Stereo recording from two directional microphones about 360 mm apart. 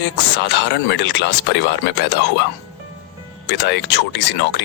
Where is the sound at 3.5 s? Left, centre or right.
Left.